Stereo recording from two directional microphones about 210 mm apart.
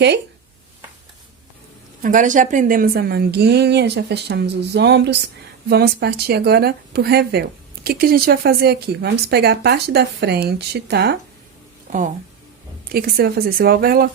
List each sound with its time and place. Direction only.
2.0 s speech: 40° right (ahead or behind)
11.9 s speech: 40° right (ahead or behind)